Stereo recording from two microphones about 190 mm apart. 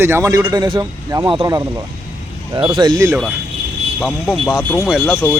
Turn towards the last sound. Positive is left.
turn(degrees=0)  # may be behind; listen again after turning